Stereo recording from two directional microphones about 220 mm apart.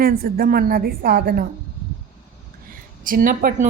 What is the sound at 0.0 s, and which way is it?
A woman's voice, 45° right (ahead or behind).